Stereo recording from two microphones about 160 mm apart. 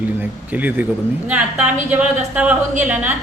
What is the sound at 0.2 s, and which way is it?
A woman's voice, 10° right (ahead or behind).